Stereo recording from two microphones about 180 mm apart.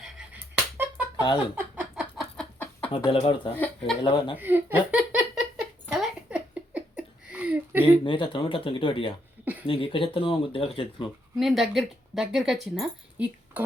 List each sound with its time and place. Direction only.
0.5 s a sound: 10° right (ahead or behind)
2.0 s chicken: centre (ahead or behind)
2.9 s speech: 30° left (ahead or behind)
3.5 s speech: 10° left (ahead or behind)
4.0 s speech: 30° left (ahead or behind)
4.4 s a sound: 10° right (ahead or behind)
8.0 s speech: 30° left (ahead or behind)
9.4 s a sound: 10° right (ahead or behind)
9.6 s speech: 30° left (ahead or behind)
11.3 s speech: centre (ahead or behind)